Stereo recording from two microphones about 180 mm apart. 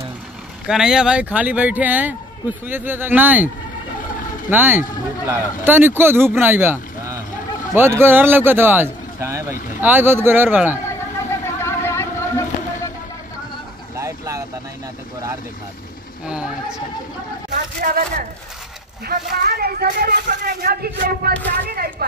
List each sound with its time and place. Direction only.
0.7 s speech: 5° right (ahead or behind)
4.5 s speech: 10° right (ahead or behind)
10.9 s vehicle: 15° left (ahead or behind)
13.9 s vehicle: 15° right (ahead or behind)
16.3 s speech: 5° right (ahead or behind)
17.7 s speech: 60° right (ahead or behind)